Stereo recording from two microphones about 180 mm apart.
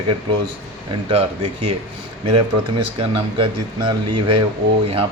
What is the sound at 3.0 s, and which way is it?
Speech, 30° right (ahead or behind).